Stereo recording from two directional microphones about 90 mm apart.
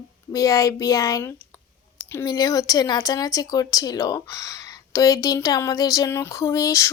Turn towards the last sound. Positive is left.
turn(degrees=35)  # may be behind; listen again after turning